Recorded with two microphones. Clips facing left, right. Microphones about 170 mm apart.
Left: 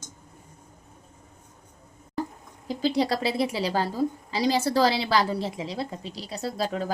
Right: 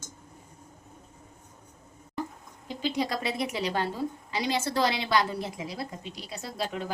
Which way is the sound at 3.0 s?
30° left (ahead or behind).